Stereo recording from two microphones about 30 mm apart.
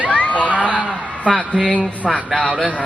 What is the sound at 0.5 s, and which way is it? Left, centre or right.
Speech, right.